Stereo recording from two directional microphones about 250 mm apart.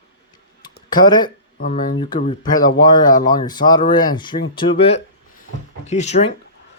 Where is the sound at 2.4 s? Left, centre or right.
Centre.